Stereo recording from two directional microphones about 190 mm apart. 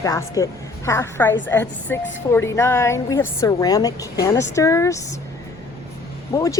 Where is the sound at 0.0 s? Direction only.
15° left (ahead or behind).